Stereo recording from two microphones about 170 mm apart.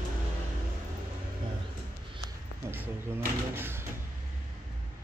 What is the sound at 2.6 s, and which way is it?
Speech, 15° right (ahead or behind).